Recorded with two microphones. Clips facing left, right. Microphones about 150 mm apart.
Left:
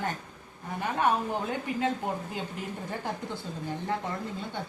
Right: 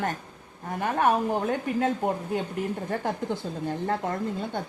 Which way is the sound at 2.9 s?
50° right (ahead or behind).